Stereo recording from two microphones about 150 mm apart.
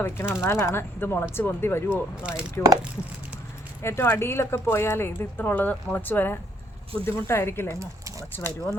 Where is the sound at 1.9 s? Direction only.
5° right (ahead or behind).